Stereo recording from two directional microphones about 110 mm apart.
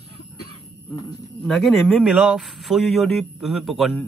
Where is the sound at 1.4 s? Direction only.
5° left (ahead or behind).